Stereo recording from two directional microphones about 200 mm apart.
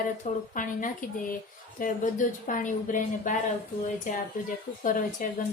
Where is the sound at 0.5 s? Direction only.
40° left (ahead or behind).